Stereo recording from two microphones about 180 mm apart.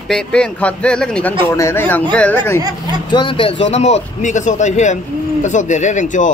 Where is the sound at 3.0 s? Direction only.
25° left (ahead or behind); by 6.3 s 45° left (ahead or behind).